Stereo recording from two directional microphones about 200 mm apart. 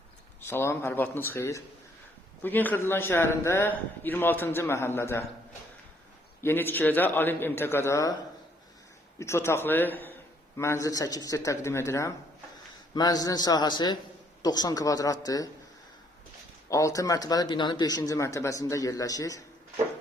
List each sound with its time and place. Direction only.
0.4 s a man's voice: 10° left (ahead or behind)
6.4 s a man's voice: 10° left (ahead or behind)
9.1 s a man's voice: 15° left (ahead or behind)
16.6 s a man's voice: 15° left (ahead or behind)